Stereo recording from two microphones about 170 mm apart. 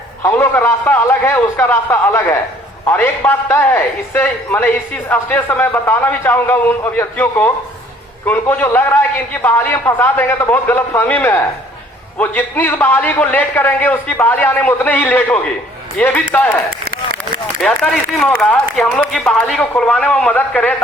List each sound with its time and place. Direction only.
0.2 s a man's voice: 15° left (ahead or behind)
18.2 s a man's voice: 5° left (ahead or behind)